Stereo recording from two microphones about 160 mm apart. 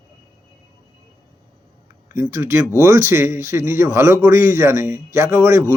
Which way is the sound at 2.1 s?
15° right (ahead or behind).